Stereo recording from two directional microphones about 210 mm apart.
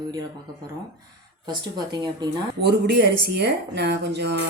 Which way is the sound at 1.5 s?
20° right (ahead or behind).